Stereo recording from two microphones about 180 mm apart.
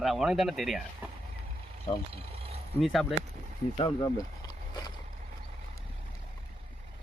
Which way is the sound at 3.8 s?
25° left (ahead or behind).